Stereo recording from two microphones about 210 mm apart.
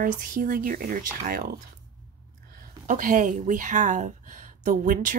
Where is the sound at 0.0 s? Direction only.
40° right (ahead or behind).